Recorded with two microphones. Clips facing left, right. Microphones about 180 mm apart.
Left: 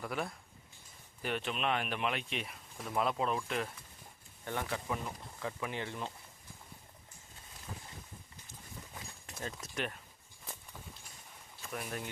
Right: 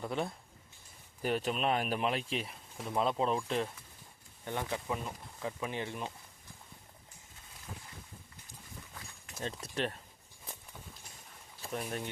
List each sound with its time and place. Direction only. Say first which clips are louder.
0.0 s speech: right 3 dB; 25° right (ahead or behind)
1.2 s speech: right 4 dB; 40° right (ahead or behind)
4.4 s speech: right 1 dB; 20° right (ahead or behind)
9.4 s speech: right 4 dB; 30° right (ahead or behind)
11.6 s speech: right 3 dB; 30° right (ahead or behind)